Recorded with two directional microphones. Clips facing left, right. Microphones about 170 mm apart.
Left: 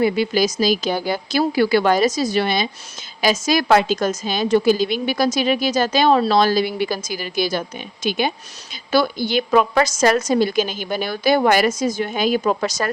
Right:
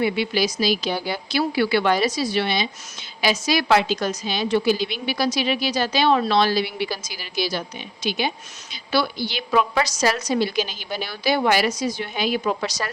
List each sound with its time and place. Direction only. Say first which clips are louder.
0.0 s a woman's voice: left 4 dB; 45° left (ahead or behind)